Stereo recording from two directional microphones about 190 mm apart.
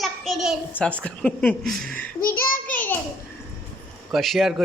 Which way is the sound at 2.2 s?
50° left (ahead or behind).